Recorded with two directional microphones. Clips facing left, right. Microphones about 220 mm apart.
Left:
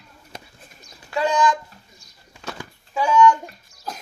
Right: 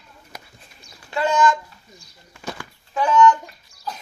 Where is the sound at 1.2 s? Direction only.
15° left (ahead or behind).